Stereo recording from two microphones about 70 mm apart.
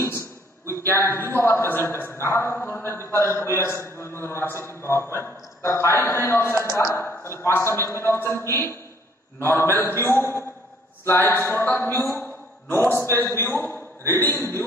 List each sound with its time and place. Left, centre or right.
0.0 s a man's voice: left